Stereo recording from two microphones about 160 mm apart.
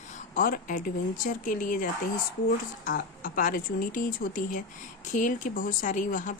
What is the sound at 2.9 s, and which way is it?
Speech, 60° left (ahead or behind).